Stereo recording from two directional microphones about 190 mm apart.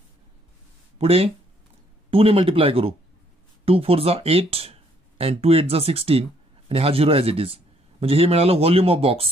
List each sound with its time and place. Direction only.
0.9 s a man's voice: 30° right (ahead or behind)